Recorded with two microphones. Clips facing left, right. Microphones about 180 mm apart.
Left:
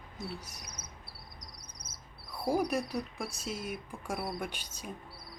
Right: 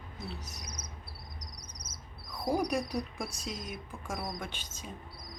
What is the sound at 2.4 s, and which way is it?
Speech, 5° left (ahead or behind).